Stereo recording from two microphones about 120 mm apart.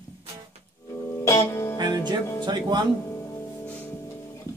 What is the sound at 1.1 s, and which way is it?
Music, 25° left (ahead or behind).